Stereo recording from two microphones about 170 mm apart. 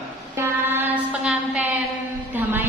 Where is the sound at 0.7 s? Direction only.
10° right (ahead or behind).